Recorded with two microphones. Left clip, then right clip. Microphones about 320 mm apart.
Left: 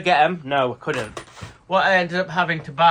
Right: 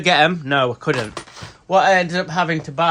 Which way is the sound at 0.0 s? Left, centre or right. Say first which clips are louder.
Right 2 dB; right.